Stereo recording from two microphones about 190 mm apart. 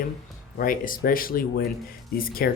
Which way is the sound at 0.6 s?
50° left (ahead or behind).